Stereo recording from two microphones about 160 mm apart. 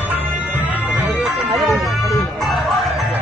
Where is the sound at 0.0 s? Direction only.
10° right (ahead or behind).